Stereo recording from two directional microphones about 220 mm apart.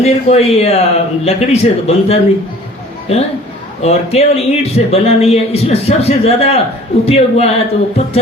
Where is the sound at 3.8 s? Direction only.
30° left (ahead or behind).